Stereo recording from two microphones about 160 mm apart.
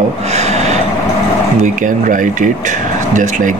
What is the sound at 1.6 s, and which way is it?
Speech, 55° right (ahead or behind).